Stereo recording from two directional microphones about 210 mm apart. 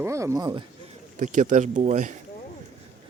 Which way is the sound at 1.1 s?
35° right (ahead or behind).